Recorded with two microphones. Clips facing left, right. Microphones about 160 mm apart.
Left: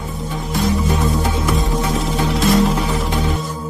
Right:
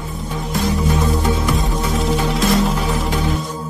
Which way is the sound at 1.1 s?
Centre (ahead or behind).